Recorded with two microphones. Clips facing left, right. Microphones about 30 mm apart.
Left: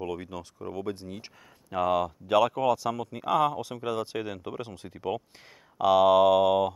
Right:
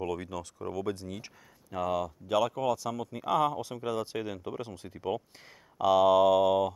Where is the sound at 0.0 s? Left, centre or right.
Left.